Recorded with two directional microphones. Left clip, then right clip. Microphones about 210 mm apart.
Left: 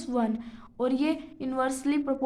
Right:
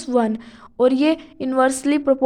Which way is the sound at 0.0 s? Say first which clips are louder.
Right 10 dB; 35° right (ahead or behind).